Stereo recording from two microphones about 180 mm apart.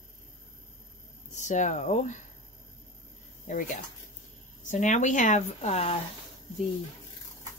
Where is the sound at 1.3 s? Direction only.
40° left (ahead or behind).